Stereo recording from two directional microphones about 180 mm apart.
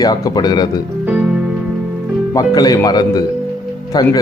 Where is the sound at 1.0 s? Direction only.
5° right (ahead or behind).